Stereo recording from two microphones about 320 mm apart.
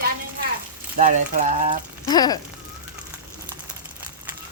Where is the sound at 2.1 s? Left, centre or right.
Centre.